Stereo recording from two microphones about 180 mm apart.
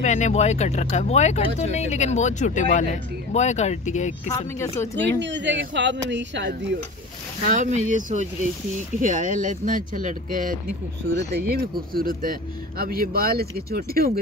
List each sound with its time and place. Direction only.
0.0 s speech: 40° left (ahead or behind)
4.3 s speech: 20° left (ahead or behind)
5.2 s speech: 85° right
7.4 s speech: 40° right (ahead or behind)
11.2 s speech: 65° right (ahead or behind)